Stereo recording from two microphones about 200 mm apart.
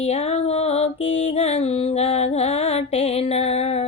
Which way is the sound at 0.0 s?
30° left (ahead or behind).